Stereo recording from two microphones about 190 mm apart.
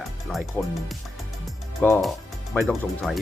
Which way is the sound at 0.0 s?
Centre (ahead or behind).